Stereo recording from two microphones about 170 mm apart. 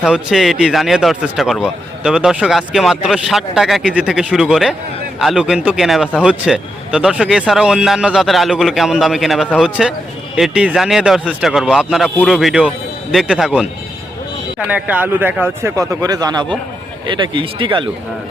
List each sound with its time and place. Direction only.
0.0 s a man's voice: 5° right (ahead or behind)
14.7 s speech: 10° right (ahead or behind); by 17.8 s 30° right (ahead or behind)